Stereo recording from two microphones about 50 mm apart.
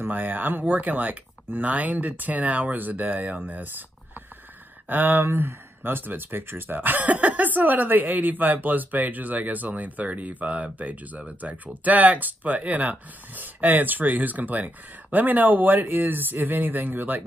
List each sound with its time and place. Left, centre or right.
0.1 s speech: right
4.8 s speech: right